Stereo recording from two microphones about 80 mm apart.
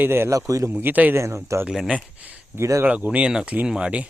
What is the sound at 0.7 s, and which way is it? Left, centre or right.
Speech, right.